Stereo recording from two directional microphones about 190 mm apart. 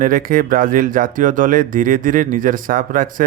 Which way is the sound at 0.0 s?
50° right (ahead or behind).